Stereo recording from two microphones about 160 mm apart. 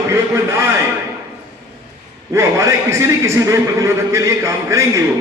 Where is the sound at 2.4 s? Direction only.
20° right (ahead or behind).